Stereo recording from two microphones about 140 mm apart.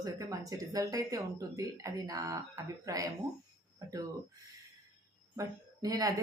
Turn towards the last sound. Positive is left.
turn(degrees=-25)  # may be behind; listen again after turning